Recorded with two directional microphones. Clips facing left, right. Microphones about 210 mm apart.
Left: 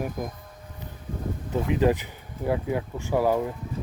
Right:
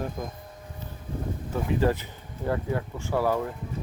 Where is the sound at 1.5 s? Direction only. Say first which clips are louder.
Left 3 dB; 20° left (ahead or behind).